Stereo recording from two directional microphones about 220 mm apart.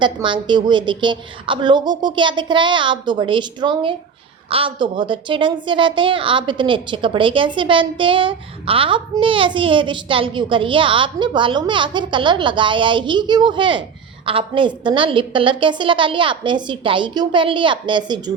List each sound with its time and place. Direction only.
0.0 s a child's voice: 20° right (ahead or behind)